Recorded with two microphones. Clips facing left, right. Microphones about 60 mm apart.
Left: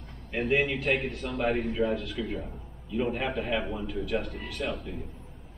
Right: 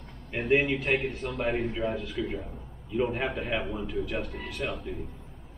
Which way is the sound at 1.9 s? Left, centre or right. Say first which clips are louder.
Even; centre.